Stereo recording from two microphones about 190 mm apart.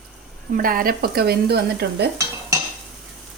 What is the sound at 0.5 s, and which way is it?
Speech, 50° right (ahead or behind).